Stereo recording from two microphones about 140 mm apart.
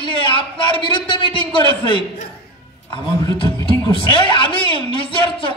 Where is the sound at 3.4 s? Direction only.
35° left (ahead or behind).